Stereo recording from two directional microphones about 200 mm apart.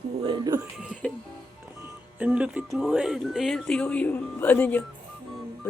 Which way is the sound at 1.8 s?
5° right (ahead or behind).